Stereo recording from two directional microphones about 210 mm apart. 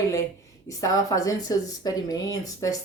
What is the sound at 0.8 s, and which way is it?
Speech, 15° left (ahead or behind).